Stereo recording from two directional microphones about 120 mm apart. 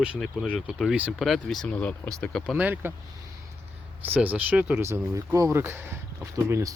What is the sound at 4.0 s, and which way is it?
Speech, 15° right (ahead or behind).